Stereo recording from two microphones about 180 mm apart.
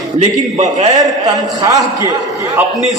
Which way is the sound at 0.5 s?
40° right (ahead or behind).